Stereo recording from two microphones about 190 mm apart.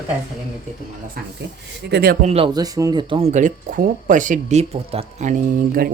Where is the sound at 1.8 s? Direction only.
55° right (ahead or behind).